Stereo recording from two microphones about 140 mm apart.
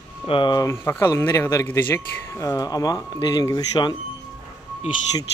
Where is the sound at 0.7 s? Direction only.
15° left (ahead or behind).